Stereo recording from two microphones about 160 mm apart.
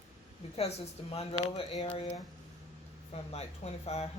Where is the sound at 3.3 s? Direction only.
40° left (ahead or behind).